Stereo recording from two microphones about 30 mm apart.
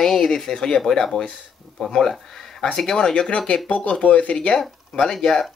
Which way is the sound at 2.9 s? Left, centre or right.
Left.